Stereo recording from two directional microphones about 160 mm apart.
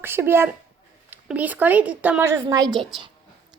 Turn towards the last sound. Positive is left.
turn(degrees=-30)  # may be behind; listen again after turning